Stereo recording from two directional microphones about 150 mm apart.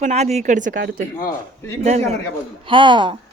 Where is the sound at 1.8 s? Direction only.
50° right (ahead or behind).